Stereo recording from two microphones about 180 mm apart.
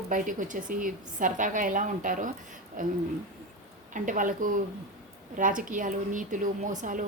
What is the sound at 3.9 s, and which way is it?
Speech, 45° right (ahead or behind).